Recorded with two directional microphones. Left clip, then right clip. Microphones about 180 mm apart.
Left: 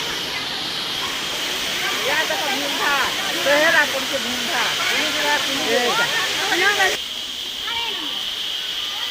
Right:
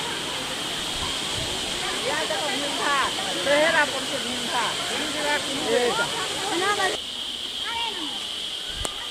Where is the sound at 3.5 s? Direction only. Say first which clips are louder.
Left 4 dB; 35° left (ahead or behind).